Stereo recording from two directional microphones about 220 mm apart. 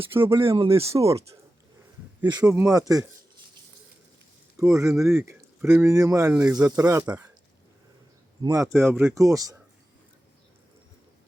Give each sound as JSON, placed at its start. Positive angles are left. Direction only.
{"t": 0.1, "sound": "speech", "side_deg": -10}
{"t": 2.2, "sound": "speech", "side_deg": -20}
{"t": 4.7, "sound": "speech", "side_deg": -15}
{"t": 8.4, "sound": "speech", "side_deg": -15}